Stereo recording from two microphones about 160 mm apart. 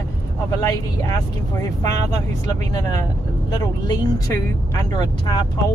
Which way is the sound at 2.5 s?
25° left (ahead or behind).